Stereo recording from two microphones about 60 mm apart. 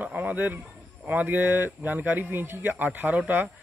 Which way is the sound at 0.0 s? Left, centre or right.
Right.